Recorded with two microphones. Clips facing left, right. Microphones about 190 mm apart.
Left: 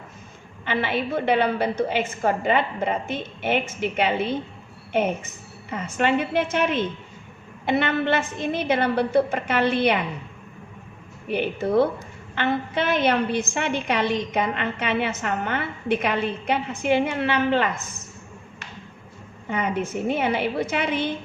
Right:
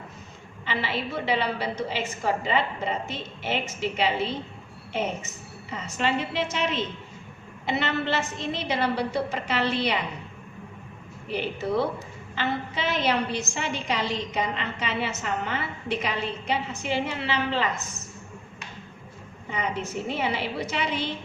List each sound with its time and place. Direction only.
0.6 s a woman's voice: 55° left (ahead or behind)
11.3 s a woman's voice: 55° left (ahead or behind)
19.5 s a woman's voice: 55° left (ahead or behind)